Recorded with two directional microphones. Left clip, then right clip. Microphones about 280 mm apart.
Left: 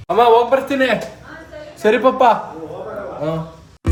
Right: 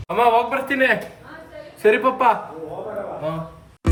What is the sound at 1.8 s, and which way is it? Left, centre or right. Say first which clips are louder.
Speech: left 3 dB; centre.